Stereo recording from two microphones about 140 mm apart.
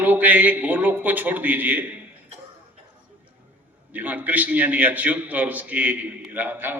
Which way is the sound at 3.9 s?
10° right (ahead or behind).